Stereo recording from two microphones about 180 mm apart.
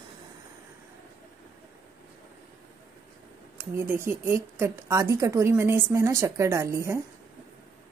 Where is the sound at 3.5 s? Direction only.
15° right (ahead or behind).